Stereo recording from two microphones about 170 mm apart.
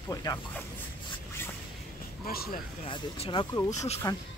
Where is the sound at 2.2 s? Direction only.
60° left (ahead or behind).